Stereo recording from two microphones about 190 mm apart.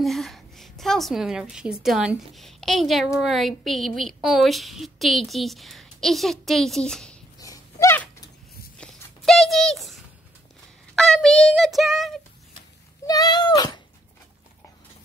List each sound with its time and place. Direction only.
0.0 s a woman's voice: centre (ahead or behind)
7.3 s dog: 20° left (ahead or behind)
8.7 s a sound: 5° left (ahead or behind)
11.0 s child singing: centre (ahead or behind)
13.0 s speech: 20° left (ahead or behind)